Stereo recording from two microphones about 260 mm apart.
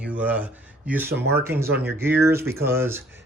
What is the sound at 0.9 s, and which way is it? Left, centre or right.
Speech, centre.